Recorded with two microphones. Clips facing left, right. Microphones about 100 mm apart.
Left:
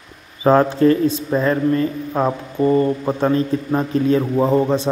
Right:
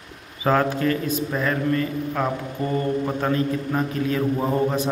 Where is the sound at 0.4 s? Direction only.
30° left (ahead or behind).